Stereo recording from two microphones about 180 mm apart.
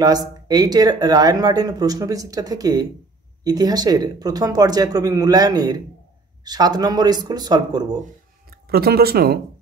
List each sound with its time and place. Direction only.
0.0 s speech: 20° right (ahead or behind)
8.5 s speech: 60° right (ahead or behind)